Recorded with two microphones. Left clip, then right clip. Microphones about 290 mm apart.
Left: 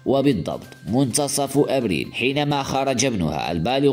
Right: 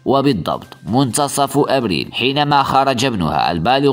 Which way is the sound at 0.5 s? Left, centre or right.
Centre.